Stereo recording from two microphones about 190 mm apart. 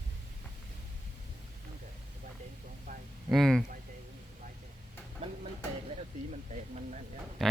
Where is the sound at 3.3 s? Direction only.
Centre (ahead or behind).